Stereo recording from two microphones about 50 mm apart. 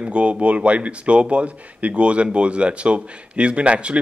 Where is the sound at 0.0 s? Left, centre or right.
Right.